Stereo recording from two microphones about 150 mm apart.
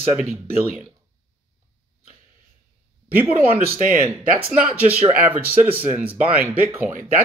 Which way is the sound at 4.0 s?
10° right (ahead or behind).